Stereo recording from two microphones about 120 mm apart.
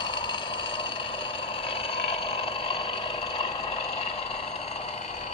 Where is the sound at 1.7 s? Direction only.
50° left (ahead or behind).